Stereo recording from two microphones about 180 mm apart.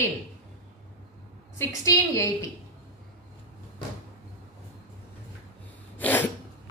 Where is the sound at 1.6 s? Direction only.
20° left (ahead or behind).